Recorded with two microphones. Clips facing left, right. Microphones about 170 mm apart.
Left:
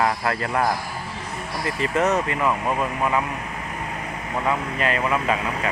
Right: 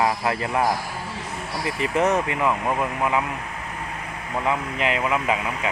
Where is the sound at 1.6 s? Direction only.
15° right (ahead or behind).